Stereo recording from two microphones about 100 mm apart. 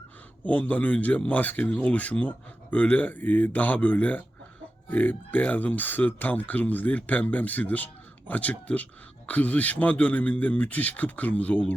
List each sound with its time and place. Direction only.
0.4 s speech: 15° left (ahead or behind)